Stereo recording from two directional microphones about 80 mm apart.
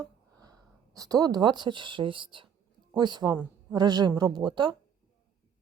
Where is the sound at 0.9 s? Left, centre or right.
Right.